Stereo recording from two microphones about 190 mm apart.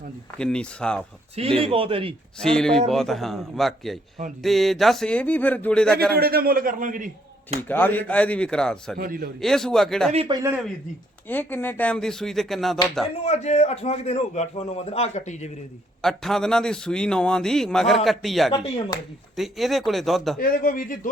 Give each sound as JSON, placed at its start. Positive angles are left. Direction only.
{"t": 0.3, "sound": "a man's voice", "side_deg": 5}
{"t": 1.4, "sound": "a man's voice", "side_deg": -30}
{"t": 2.4, "sound": "a man's voice", "side_deg": 5}
{"t": 6.0, "sound": "a man's voice", "side_deg": -55}
{"t": 7.7, "sound": "speech", "side_deg": 10}
{"t": 9.0, "sound": "a man's voice", "side_deg": -50}
{"t": 9.4, "sound": "a man's voice", "side_deg": 0}
{"t": 10.1, "sound": "a man's voice", "side_deg": -30}
{"t": 11.3, "sound": "a man's voice", "side_deg": 10}
{"t": 13.2, "sound": "a man's voice", "side_deg": 35}
{"t": 16.0, "sound": "a man's voice", "side_deg": 0}
{"t": 18.9, "sound": "speech", "side_deg": 20}
{"t": 19.4, "sound": "a man's voice", "side_deg": 0}
{"t": 20.4, "sound": "a man's voice", "side_deg": 50}